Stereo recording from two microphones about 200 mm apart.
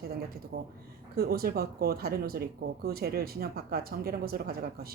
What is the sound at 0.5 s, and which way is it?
A woman's voice, 50° right (ahead or behind).